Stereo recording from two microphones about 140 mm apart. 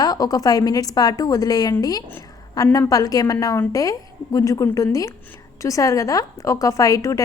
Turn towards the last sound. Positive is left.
turn(degrees=25)  # may be behind; listen again after turning